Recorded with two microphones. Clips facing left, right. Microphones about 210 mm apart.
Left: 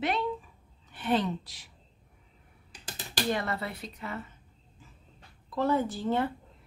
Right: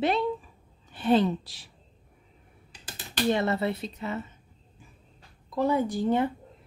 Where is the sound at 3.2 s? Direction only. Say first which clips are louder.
Right 7 dB; 25° right (ahead or behind).